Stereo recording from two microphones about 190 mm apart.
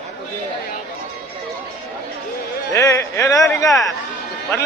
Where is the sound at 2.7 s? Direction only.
15° left (ahead or behind).